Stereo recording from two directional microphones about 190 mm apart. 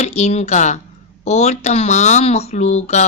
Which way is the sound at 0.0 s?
35° left (ahead or behind).